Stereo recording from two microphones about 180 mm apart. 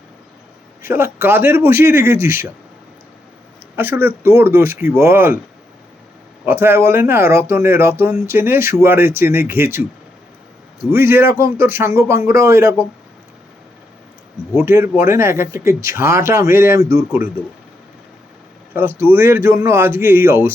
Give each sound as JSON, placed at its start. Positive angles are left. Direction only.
{"t": 0.8, "sound": "speech", "side_deg": -15}
{"t": 3.8, "sound": "speech", "side_deg": -10}
{"t": 6.4, "sound": "speech", "side_deg": -10}
{"t": 10.9, "sound": "speech", "side_deg": -15}
{"t": 14.6, "sound": "speech", "side_deg": -15}
{"t": 18.7, "sound": "speech", "side_deg": -10}